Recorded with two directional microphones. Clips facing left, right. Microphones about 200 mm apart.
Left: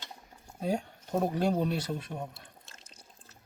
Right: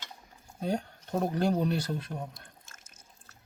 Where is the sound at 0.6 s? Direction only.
5° left (ahead or behind).